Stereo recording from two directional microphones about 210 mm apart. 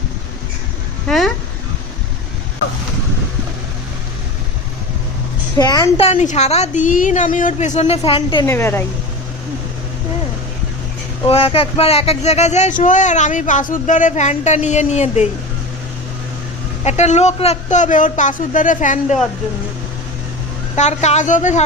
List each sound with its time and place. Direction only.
1.0 s a sound: centre (ahead or behind)
5.5 s speech: 20° left (ahead or behind)
8.4 s speech: 10° left (ahead or behind)
11.3 s speech: 25° left (ahead or behind)
16.8 s speech: 30° left (ahead or behind)
20.7 s speech: 35° left (ahead or behind)